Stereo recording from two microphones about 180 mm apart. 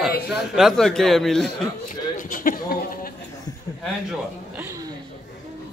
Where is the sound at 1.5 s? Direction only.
50° left (ahead or behind).